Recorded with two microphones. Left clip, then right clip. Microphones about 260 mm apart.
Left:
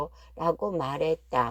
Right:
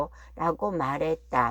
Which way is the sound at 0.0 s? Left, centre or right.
Left.